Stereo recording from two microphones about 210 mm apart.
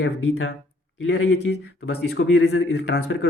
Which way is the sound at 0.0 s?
55° left (ahead or behind).